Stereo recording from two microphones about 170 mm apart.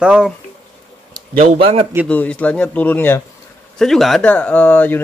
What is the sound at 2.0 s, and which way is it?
Speech, 10° left (ahead or behind).